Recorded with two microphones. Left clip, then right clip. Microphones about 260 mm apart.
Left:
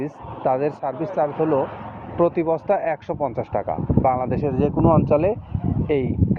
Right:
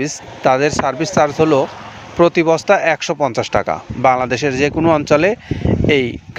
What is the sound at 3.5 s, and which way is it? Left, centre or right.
Speech, right.